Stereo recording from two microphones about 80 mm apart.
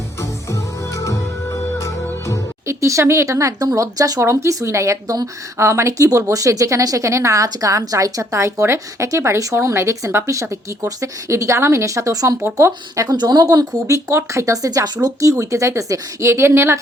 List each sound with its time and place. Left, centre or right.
0.2 s music: left
2.6 s a woman's voice: right
13.1 s a woman's voice: right